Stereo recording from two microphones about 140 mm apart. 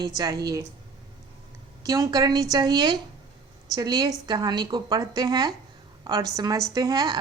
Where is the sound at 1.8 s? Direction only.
25° right (ahead or behind).